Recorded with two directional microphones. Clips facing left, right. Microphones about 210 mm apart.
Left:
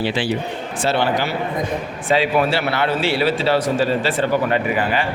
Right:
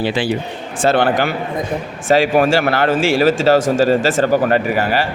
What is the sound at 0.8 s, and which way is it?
Speech, 50° right (ahead or behind).